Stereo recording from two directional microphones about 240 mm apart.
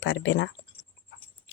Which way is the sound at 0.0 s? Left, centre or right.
Left.